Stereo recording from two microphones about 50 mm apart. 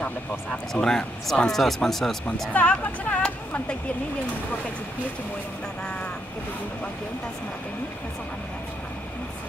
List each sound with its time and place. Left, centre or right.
0.0 s speech: centre
2.5 s speech: left